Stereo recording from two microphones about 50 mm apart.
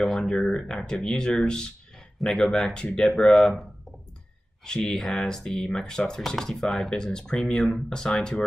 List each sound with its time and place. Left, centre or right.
0.0 s speech: centre
2.5 s speech: centre
4.6 s speech: centre
4.9 s speech: centre